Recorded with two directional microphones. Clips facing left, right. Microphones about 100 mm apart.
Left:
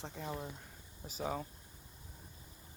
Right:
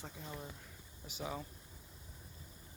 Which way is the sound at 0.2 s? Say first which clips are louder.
Left 9 dB; 75° left (ahead or behind).